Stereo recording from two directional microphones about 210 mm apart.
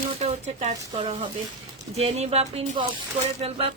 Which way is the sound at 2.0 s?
30° right (ahead or behind).